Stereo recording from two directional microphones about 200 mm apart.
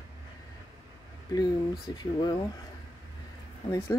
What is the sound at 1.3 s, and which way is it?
A woman's voice, 20° left (ahead or behind).